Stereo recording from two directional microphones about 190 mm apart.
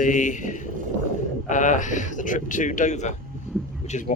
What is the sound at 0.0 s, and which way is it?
Speech, 40° left (ahead or behind).